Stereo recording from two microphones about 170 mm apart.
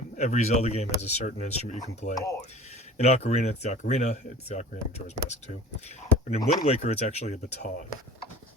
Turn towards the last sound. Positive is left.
turn(degrees=40)  # may be behind; listen again after turning